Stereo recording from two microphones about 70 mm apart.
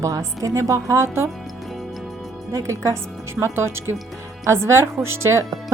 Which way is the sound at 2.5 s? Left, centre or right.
Right.